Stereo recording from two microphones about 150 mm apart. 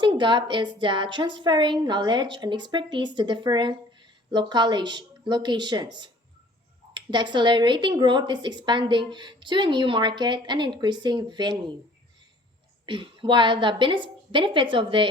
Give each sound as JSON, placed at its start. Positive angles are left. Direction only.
{"t": 0.0, "sound": "a woman's voice", "side_deg": -30}
{"t": 12.8, "sound": "speech", "side_deg": -35}